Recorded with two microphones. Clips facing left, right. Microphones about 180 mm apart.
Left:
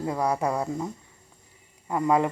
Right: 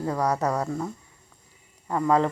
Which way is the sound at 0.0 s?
10° left (ahead or behind).